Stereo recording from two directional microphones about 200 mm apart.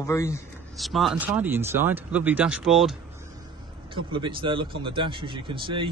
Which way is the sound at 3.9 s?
25° right (ahead or behind).